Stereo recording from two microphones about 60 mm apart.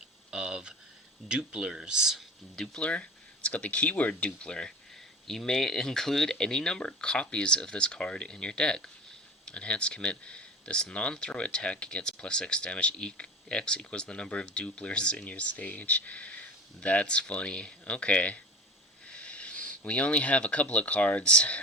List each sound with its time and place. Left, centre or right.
0.3 s a sound: centre
1.3 s speech: centre
2.6 s speech: centre